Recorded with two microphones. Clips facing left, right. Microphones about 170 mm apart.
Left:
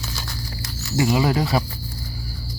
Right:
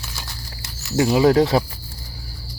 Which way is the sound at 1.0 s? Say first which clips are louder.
Right 6 dB; 25° right (ahead or behind).